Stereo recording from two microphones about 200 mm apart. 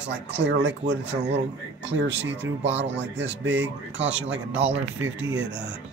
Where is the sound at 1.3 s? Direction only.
65° right (ahead or behind).